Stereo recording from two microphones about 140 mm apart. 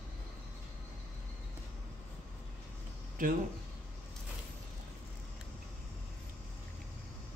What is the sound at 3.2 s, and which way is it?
Speech, 75° right (ahead or behind).